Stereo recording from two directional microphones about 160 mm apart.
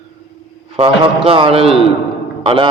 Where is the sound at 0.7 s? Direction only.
35° right (ahead or behind).